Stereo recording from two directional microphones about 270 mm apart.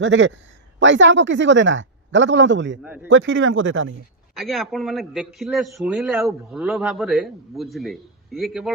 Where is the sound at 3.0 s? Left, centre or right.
Right.